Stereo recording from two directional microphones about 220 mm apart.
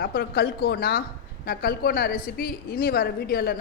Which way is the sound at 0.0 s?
45° left (ahead or behind).